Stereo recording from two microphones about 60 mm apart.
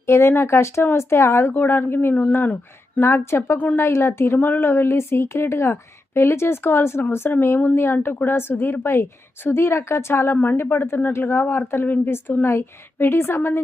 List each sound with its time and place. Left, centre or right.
0.0 s speech: left
1.5 s a woman's voice: left
3.0 s speech: left
4.4 s a woman's voice: left
10.3 s a woman's voice: left
10.6 s a woman's voice: left